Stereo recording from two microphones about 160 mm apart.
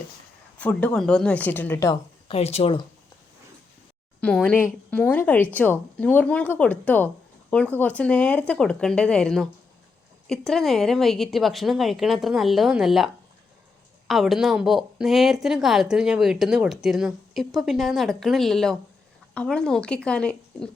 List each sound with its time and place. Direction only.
0.6 s speech: 10° left (ahead or behind)
2.2 s speech: 40° left (ahead or behind)
4.2 s a woman's voice: 5° left (ahead or behind)
14.1 s a woman's voice: centre (ahead or behind)